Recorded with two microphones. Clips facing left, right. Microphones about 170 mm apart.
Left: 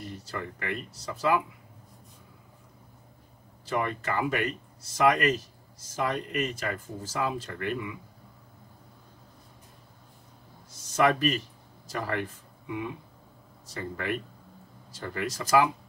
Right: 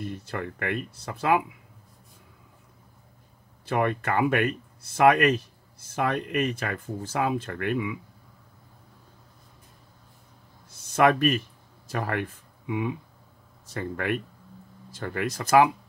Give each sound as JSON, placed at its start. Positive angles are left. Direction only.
{"t": 0.0, "sound": "speech", "side_deg": -55}
{"t": 3.6, "sound": "speech", "side_deg": -60}
{"t": 10.7, "sound": "a sound", "side_deg": -60}
{"t": 11.9, "sound": "speech", "side_deg": -55}